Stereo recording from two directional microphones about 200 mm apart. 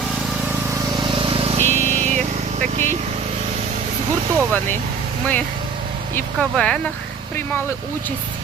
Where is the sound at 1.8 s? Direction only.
35° right (ahead or behind).